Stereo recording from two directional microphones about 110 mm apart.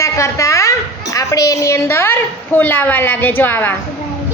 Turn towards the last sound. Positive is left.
turn(degrees=15)  # may be behind; listen again after turning